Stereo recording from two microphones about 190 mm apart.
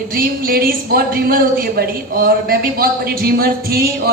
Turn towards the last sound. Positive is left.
turn(degrees=-55)  # may be behind; listen again after turning